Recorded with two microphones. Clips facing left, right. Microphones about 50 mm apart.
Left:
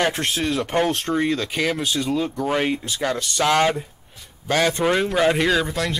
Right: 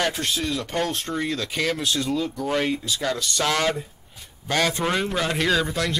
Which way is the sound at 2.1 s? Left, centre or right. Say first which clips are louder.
Left 2 dB; left.